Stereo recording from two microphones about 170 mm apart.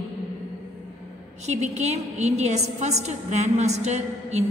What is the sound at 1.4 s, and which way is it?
A woman's voice, 40° right (ahead or behind).